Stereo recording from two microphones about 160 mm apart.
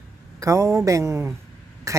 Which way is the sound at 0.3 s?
20° right (ahead or behind).